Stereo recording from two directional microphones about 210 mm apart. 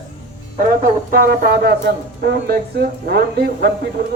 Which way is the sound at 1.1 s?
50° right (ahead or behind).